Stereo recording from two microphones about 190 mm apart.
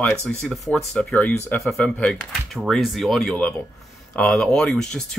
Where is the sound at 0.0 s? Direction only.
5° left (ahead or behind).